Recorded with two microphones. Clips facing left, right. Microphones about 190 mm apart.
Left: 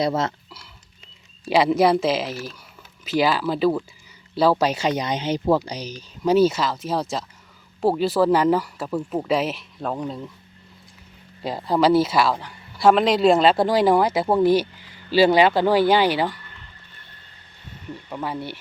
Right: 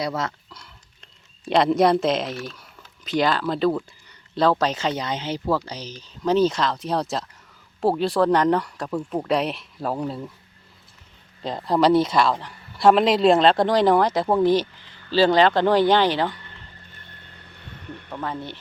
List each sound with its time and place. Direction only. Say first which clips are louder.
0.0 s speech: left 4 dB; 25° left (ahead or behind)
0.5 s speech: left 1 dB; 5° left (ahead or behind)
11.4 s speech: even; 5° left (ahead or behind)
18.1 s speech: left 1 dB; 10° left (ahead or behind)